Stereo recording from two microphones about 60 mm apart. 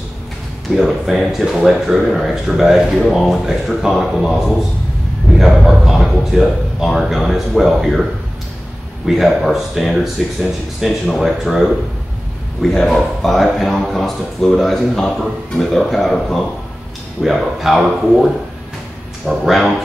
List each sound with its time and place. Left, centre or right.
0.7 s speech: centre
5.6 s speech: centre
9.0 s speech: centre
12.7 s speech: centre
17.2 s speech: centre